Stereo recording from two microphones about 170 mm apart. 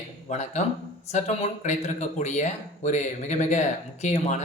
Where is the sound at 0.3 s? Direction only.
40° left (ahead or behind).